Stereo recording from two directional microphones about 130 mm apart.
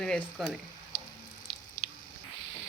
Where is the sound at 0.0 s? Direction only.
5° left (ahead or behind).